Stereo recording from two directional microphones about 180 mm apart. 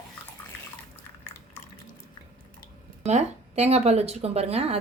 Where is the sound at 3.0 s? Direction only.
40° right (ahead or behind).